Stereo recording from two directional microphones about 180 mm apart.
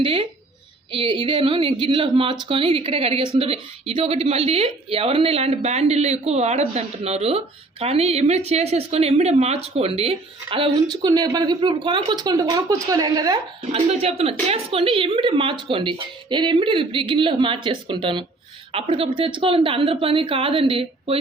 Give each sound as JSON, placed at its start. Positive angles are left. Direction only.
{"t": 0.0, "sound": "a woman's voice", "side_deg": -30}
{"t": 13.7, "sound": "a woman's voice", "side_deg": -35}